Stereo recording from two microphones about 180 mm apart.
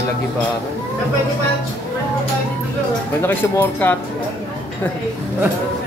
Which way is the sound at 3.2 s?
10° left (ahead or behind).